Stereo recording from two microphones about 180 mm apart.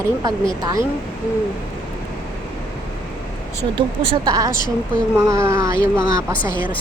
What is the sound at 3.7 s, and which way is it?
Speech, 30° right (ahead or behind).